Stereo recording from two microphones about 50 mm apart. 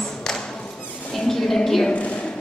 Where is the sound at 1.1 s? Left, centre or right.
Centre.